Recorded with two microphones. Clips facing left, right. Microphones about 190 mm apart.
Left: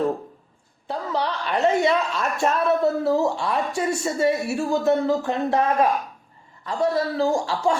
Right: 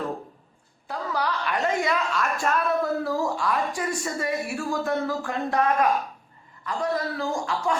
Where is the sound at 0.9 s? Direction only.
25° left (ahead or behind).